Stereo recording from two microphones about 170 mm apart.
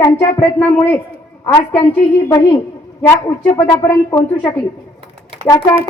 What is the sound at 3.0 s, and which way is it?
A woman's voice, 15° left (ahead or behind).